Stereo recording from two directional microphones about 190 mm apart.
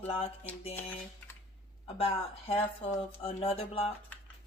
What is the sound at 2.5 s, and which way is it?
Speech, 30° left (ahead or behind).